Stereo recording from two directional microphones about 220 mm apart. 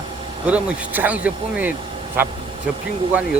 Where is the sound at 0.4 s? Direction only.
5° right (ahead or behind).